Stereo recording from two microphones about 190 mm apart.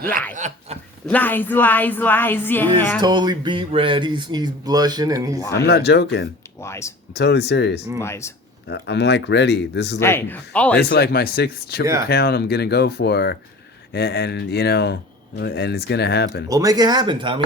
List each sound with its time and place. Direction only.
0.3 s a sound: 40° right (ahead or behind)
1.0 s speech: 10° left (ahead or behind)
3.0 s speech: 20° right (ahead or behind)
5.4 s speech: 15° left (ahead or behind)
5.6 s speech: 60° left (ahead or behind)
6.6 s a sound: 15° left (ahead or behind)
7.1 s speech: 60° left (ahead or behind)
8.0 s speech: 15° left (ahead or behind)
8.7 s speech: 65° left (ahead or behind)
10.0 s speech: 10° left (ahead or behind)
10.8 s speech: 55° left (ahead or behind)
16.5 s speech: 20° right (ahead or behind)